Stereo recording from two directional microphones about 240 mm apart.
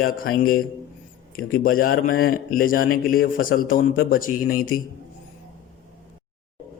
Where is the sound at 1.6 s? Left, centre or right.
Left.